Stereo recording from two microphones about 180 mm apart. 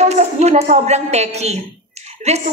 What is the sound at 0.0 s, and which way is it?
A woman's voice, 35° right (ahead or behind).